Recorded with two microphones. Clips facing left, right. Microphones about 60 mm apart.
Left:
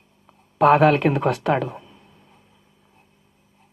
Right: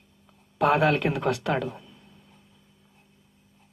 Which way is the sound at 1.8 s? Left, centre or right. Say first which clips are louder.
Left 3 dB; left.